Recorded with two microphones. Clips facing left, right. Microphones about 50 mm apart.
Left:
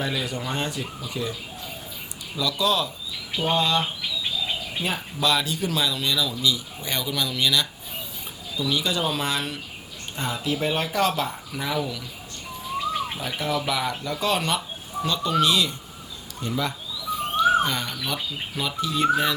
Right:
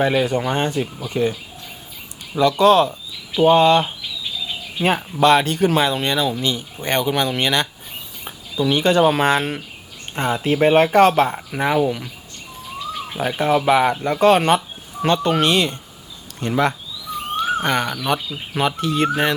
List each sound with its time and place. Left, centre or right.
0.0 s speech: right
13.1 s speech: right